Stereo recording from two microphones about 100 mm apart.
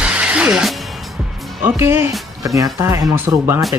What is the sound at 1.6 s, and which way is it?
Speech, 25° right (ahead or behind).